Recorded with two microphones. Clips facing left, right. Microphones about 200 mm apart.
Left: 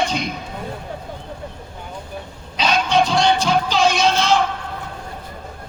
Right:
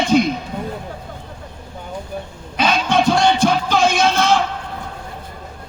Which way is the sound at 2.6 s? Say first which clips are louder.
Right 1 dB; 55° right (ahead or behind).